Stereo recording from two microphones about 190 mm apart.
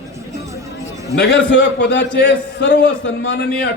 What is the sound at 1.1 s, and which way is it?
A man's voice, 65° left (ahead or behind).